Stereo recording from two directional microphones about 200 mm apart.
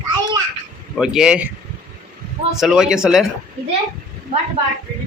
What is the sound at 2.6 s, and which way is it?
Speech, centre (ahead or behind).